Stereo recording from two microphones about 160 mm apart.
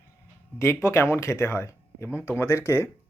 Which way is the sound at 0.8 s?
15° left (ahead or behind).